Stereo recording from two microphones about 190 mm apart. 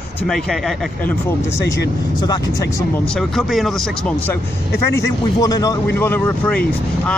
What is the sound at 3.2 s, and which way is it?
Speech, centre (ahead or behind).